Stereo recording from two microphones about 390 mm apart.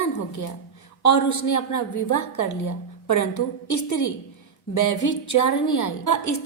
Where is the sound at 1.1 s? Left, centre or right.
Left.